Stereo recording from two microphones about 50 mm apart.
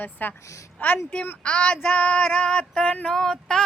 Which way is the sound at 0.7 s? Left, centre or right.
Left.